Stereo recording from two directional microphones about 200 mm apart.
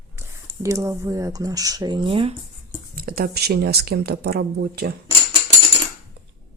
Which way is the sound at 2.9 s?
45° right (ahead or behind).